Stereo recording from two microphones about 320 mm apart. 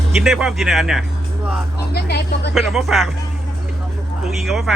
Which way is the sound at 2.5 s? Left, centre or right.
Centre.